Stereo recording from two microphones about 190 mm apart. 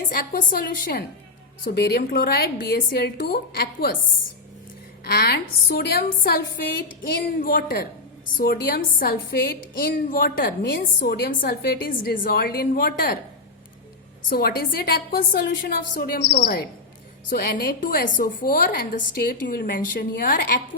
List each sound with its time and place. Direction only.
0.1 s a woman's voice: 50° left (ahead or behind)
5.0 s a woman's voice: 55° left (ahead or behind)
14.3 s a woman's voice: 50° left (ahead or behind)